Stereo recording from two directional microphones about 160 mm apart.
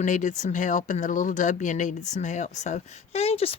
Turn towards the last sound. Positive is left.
turn(degrees=35)  # may be behind; listen again after turning